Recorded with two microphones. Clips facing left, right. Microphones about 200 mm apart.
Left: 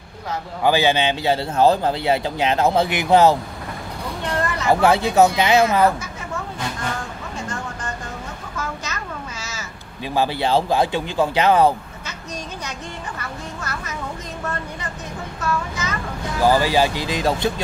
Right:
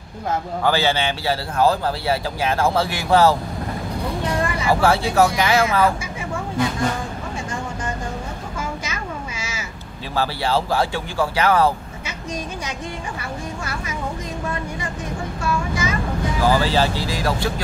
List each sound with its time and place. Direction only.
0.7 s a man's voice: 15° left (ahead or behind)
4.3 s vehicle: 10° right (ahead or behind)
4.7 s a man's voice: 20° left (ahead or behind)
8.5 s crow: 10° right (ahead or behind)
10.1 s a man's voice: 20° left (ahead or behind)
13.2 s a woman's voice: 10° right (ahead or behind)
16.4 s speech: 15° left (ahead or behind)